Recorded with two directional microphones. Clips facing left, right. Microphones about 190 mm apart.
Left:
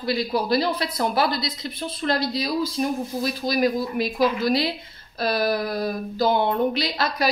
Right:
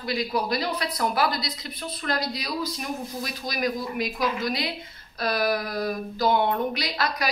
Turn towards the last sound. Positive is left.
turn(degrees=25)  # may be behind; listen again after turning